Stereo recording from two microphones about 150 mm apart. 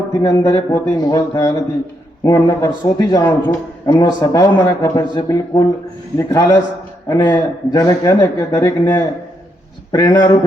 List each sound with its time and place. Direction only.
0.2 s a man's voice: 25° left (ahead or behind)